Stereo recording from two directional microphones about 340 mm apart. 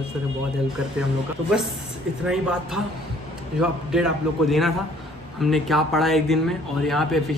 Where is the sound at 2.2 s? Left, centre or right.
Centre.